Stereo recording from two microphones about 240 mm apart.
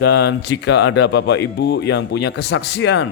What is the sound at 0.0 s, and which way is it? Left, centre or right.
A man's voice, left.